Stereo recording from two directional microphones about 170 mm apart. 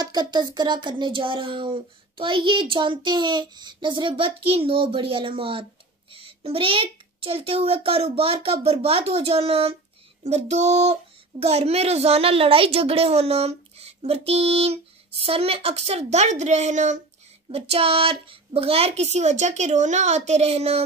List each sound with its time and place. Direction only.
0.0 s a child's voice: 25° right (ahead or behind)